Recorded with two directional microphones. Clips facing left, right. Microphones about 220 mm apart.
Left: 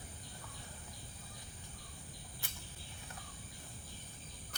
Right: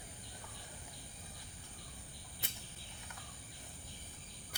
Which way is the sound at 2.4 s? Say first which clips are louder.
Right 4 dB; 20° right (ahead or behind).